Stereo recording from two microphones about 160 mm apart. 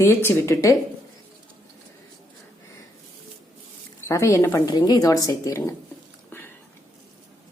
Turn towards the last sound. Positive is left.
turn(degrees=10)  # may be behind; listen again after turning